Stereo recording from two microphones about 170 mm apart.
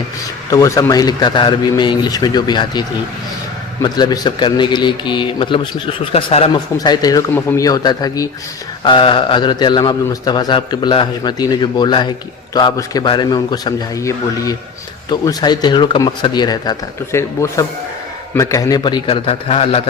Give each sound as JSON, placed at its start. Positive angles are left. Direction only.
{"t": 0.5, "sound": "a man's voice", "side_deg": 20}
{"t": 3.8, "sound": "a man's voice", "side_deg": 25}
{"t": 6.7, "sound": "a man's voice", "side_deg": 25}